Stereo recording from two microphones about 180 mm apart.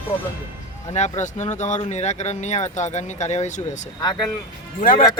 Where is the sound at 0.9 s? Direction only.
40° left (ahead or behind).